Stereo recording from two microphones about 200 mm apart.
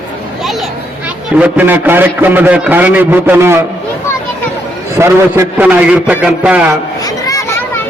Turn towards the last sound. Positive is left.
turn(degrees=15)  # may be behind; listen again after turning